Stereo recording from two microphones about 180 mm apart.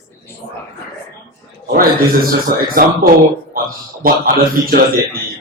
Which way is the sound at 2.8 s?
55° right (ahead or behind).